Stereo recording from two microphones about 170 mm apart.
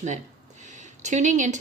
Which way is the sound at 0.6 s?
45° right (ahead or behind).